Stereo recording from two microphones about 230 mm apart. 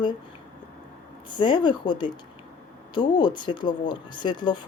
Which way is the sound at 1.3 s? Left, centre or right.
Centre.